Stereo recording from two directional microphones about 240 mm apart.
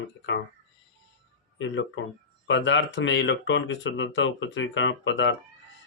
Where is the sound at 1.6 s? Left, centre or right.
Left.